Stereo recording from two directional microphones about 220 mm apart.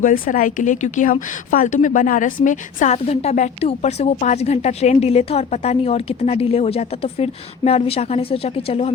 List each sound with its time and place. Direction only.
0.0 s speech: 35° left (ahead or behind)